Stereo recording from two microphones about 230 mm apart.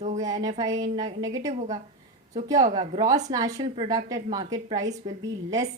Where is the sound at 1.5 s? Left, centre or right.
Right.